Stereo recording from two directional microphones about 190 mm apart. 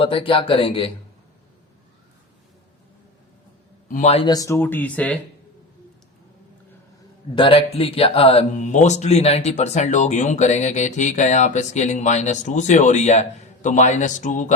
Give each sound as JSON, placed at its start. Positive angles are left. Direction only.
{"t": 0.0, "sound": "speech", "side_deg": 30}
{"t": 3.8, "sound": "a man's voice", "side_deg": 45}
{"t": 4.1, "sound": "speech", "side_deg": 30}
{"t": 4.4, "sound": "speech", "side_deg": 15}
{"t": 7.3, "sound": "speech", "side_deg": 30}